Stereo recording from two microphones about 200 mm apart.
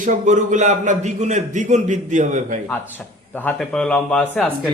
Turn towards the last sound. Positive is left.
turn(degrees=5)  # may be behind; listen again after turning